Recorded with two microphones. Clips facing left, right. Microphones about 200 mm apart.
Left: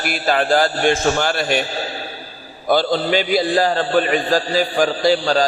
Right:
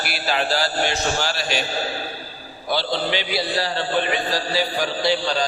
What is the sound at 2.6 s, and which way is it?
A man's voice, 50° left (ahead or behind).